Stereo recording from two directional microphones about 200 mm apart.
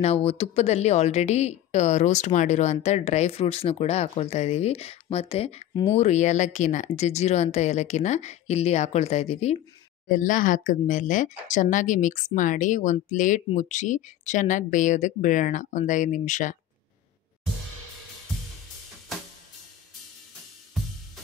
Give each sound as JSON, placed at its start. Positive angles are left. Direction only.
{"t": 0.0, "sound": "speech", "side_deg": 30}